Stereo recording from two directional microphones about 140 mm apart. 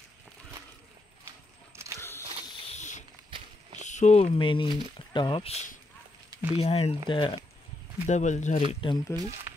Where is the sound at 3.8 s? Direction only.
60° left (ahead or behind).